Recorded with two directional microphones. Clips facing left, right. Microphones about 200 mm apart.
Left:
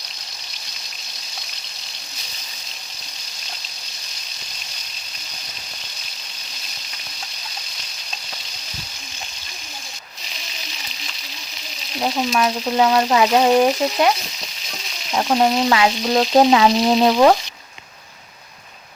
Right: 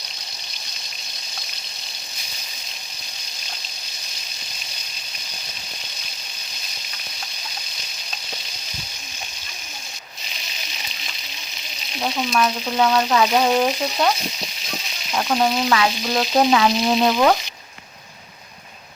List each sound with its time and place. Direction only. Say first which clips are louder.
12.0 s frying: left 2 dB; 20° left (ahead or behind)
15.1 s frying: left 3 dB; 25° left (ahead or behind)